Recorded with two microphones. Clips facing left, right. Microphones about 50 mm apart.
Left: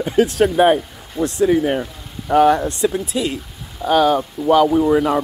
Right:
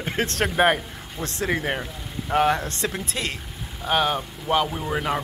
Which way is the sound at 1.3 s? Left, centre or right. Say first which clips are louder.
Left 10 dB; right.